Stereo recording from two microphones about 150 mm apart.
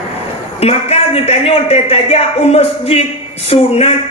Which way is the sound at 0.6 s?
45° left (ahead or behind).